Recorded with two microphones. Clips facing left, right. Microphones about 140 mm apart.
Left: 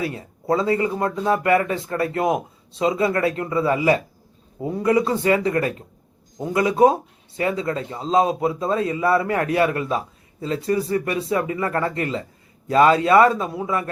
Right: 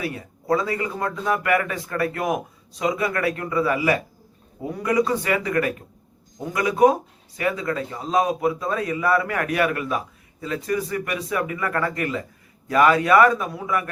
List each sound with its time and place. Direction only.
0.0 s speech: 25° left (ahead or behind)